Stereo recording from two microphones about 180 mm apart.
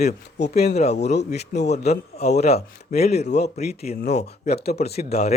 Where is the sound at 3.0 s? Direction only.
35° left (ahead or behind).